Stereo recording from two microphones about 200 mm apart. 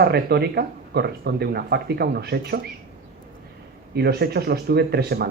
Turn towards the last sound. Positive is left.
turn(degrees=-50)  # may be behind; listen again after turning